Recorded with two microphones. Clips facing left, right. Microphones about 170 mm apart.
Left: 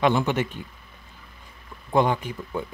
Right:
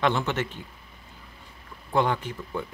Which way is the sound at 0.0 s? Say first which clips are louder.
Left 4 dB; 10° left (ahead or behind).